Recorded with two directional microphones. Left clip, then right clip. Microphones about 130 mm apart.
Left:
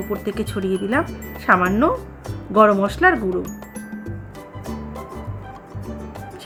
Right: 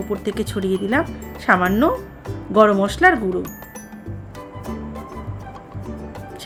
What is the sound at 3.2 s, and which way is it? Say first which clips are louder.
Speech: even; centre (ahead or behind).